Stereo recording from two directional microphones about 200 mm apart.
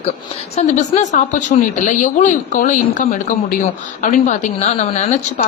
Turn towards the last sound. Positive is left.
turn(degrees=30)  # may be behind; listen again after turning